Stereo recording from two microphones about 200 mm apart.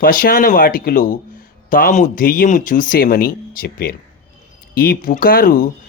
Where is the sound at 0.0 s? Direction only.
45° left (ahead or behind).